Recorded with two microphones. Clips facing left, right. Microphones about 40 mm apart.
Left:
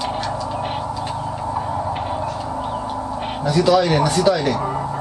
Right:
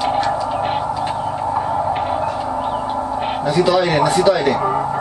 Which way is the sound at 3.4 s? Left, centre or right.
Centre.